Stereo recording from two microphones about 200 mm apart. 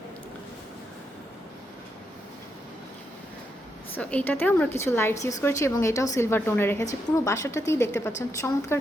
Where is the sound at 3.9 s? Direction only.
10° left (ahead or behind).